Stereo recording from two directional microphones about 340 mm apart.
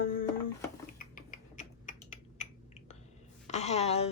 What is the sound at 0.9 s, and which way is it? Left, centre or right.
Typing, left.